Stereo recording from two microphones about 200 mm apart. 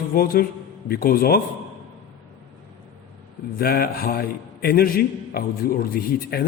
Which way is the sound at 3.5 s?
50° left (ahead or behind).